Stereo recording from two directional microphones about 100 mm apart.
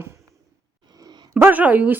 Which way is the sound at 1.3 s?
20° right (ahead or behind).